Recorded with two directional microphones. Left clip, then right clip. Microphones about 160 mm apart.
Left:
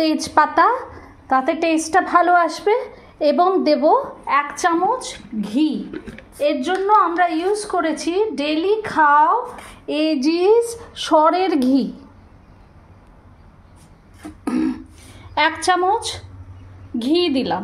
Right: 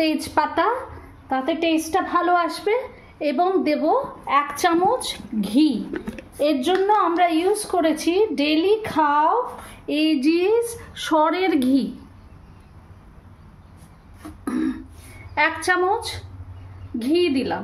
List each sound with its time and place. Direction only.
0.2 s a woman's voice: 20° left (ahead or behind)
4.3 s a woman's voice: 15° right (ahead or behind)
9.8 s a woman's voice: 10° left (ahead or behind)
14.4 s throat clearing: 25° left (ahead or behind)
15.3 s a woman's voice: 25° left (ahead or behind)